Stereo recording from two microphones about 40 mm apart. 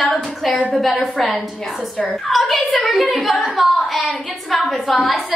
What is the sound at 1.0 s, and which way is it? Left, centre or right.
A woman's voice, centre.